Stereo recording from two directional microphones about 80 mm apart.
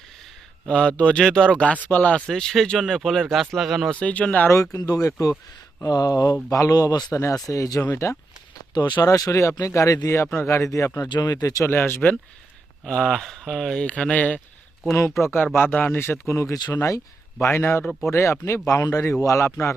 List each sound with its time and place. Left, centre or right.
0.7 s speech: centre
3.9 s speech: centre
4.5 s speech: left
7.1 s speech: left
7.8 s speech: left
8.7 s speech: left
11.1 s speech: left
11.7 s speech: left
12.8 s speech: centre
15.2 s speech: left
16.6 s speech: left
17.5 s speech: left